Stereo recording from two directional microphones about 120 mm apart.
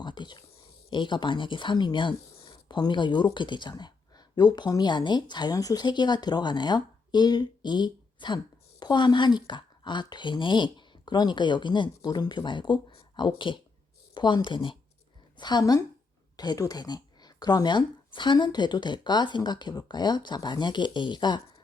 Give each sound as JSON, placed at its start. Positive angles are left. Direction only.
{"t": 0.0, "sound": "whispering", "side_deg": 40}
{"t": 0.9, "sound": "speech", "side_deg": 40}